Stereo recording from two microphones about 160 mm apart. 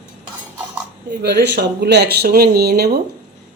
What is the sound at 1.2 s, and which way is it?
Speech, 90° right.